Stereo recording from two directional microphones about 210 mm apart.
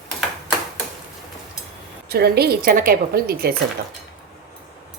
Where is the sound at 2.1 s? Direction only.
50° right (ahead or behind).